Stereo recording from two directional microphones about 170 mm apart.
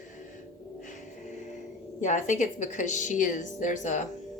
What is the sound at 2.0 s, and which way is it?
A woman's voice, 45° left (ahead or behind).